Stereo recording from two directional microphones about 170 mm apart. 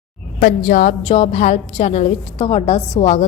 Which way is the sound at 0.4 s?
50° left (ahead or behind).